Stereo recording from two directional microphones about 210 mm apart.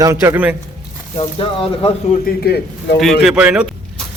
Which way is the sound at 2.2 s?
50° left (ahead or behind).